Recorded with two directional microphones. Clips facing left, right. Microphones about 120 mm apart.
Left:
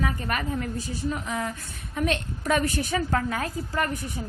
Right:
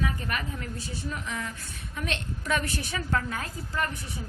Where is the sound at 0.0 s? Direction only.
45° left (ahead or behind).